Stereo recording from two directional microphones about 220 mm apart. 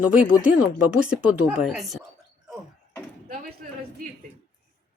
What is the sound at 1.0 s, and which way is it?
Speech, 5° right (ahead or behind).